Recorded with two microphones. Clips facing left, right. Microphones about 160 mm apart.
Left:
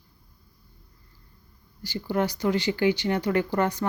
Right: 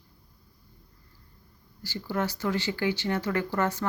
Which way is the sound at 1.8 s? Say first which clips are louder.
Left 4 dB; 15° left (ahead or behind).